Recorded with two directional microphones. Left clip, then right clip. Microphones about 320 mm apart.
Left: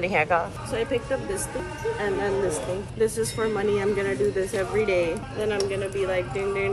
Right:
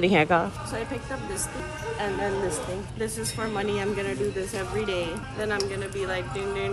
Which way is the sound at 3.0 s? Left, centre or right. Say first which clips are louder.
Left 8 dB; centre.